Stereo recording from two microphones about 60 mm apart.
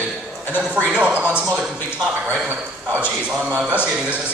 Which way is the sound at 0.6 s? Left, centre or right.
Right.